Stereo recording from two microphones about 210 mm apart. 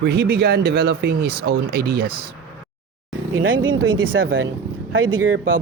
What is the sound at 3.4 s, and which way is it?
Speech, 65° right (ahead or behind).